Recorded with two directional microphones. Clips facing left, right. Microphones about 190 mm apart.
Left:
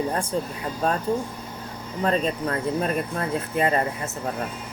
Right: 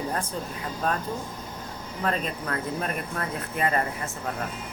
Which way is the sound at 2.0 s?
30° left (ahead or behind).